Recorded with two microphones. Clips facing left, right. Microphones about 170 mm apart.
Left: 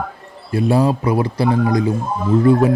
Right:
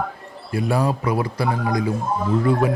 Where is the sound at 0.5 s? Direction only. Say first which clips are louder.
Left 5 dB; 25° left (ahead or behind).